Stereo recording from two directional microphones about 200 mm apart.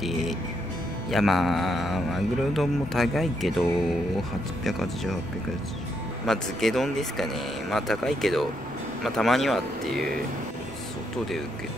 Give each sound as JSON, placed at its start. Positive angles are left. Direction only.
{"t": 0.0, "sound": "music", "side_deg": 0}
{"t": 1.1, "sound": "a man's voice", "side_deg": 0}
{"t": 4.6, "sound": "a man's voice", "side_deg": 0}
{"t": 6.2, "sound": "a man's voice", "side_deg": 0}